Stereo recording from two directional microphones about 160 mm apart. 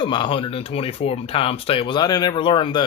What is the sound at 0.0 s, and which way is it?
Speech, 30° left (ahead or behind).